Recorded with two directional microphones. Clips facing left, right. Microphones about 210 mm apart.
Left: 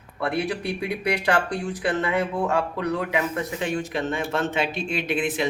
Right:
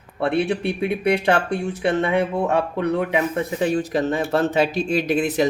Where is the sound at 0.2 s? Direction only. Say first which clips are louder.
Right 5 dB; 25° right (ahead or behind).